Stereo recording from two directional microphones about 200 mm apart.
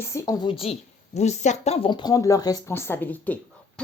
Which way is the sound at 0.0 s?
15° left (ahead or behind).